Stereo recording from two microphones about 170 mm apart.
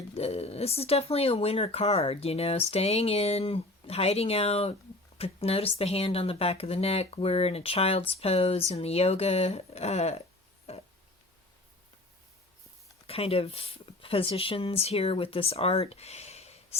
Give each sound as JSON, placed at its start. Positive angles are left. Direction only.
{"t": 0.1, "sound": "speech", "side_deg": 35}
{"t": 10.7, "sound": "a sound", "side_deg": 35}
{"t": 13.1, "sound": "speech", "side_deg": 35}